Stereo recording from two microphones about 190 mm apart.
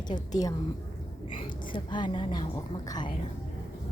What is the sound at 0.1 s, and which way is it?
Speech, 20° left (ahead or behind).